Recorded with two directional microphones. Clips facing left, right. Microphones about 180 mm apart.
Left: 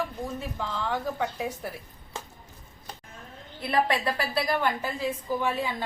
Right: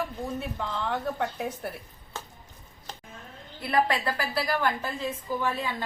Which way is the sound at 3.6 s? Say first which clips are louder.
Even; 25° left (ahead or behind).